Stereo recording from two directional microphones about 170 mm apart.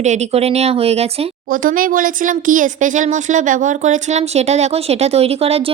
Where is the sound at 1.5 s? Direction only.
55° right (ahead or behind).